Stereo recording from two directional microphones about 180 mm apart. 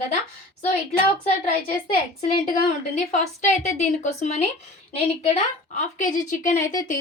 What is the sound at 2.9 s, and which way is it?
A woman's voice, 40° left (ahead or behind).